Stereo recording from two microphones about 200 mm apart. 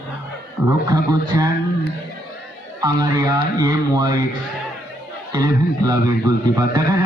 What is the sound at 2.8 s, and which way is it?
A man's voice, 20° right (ahead or behind).